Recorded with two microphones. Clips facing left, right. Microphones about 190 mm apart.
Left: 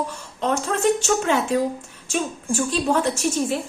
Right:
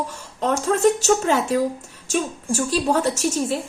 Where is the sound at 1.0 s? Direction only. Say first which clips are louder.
Right 2 dB; 40° right (ahead or behind).